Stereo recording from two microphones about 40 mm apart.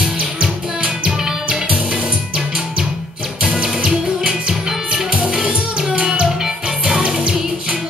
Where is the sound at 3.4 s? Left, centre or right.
Right.